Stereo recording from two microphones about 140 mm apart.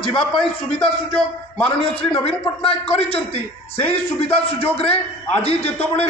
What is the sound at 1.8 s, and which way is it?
A man's voice, 40° left (ahead or behind).